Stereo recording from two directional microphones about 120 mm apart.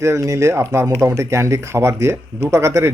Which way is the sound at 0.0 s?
25° right (ahead or behind).